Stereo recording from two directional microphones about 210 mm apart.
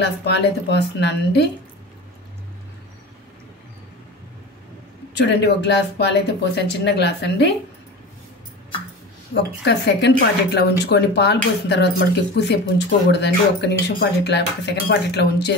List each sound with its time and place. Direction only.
0.0 s speech: 55° left (ahead or behind)
5.1 s speech: 55° left (ahead or behind)
9.7 s speech: 55° left (ahead or behind)